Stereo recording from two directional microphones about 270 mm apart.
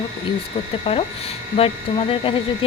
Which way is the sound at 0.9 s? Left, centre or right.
Centre.